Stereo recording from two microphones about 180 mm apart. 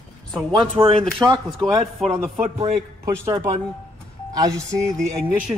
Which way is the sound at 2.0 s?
Centre (ahead or behind).